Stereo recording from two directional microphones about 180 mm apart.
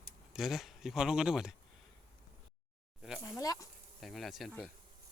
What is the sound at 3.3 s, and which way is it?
Insect, 20° left (ahead or behind).